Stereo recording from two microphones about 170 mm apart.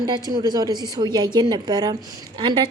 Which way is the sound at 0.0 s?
25° right (ahead or behind).